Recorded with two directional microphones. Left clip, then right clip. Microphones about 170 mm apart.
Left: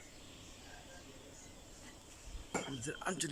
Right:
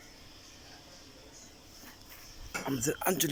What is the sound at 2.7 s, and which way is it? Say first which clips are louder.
Speech: right 10 dB; 25° right (ahead or behind).